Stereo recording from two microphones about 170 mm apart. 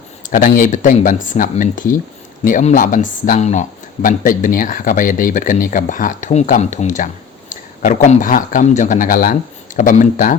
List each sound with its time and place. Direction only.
0.3 s a man's voice: 50° left (ahead or behind)